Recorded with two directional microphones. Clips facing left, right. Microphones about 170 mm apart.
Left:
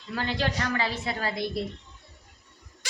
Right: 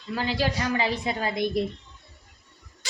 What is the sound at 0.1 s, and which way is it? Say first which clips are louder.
A woman's voice: right 2 dB; 5° right (ahead or behind).